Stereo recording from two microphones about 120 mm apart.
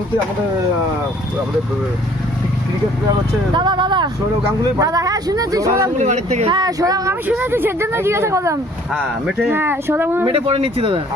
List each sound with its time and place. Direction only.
3.5 s speech: 40° right (ahead or behind)
4.6 s speech: 30° right (ahead or behind)
6.0 s speech: 75° right (ahead or behind)
6.5 s speech: 35° right (ahead or behind)
7.3 s speech: 15° right (ahead or behind)
10.2 s speech: 50° right (ahead or behind)